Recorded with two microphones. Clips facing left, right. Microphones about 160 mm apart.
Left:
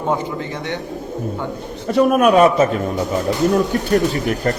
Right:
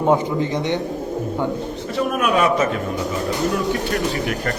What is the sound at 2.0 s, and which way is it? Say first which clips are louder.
Speech: left 7 dB; 40° left (ahead or behind).